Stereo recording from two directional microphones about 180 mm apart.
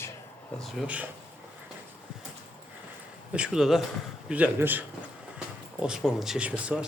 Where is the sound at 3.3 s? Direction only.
5° right (ahead or behind).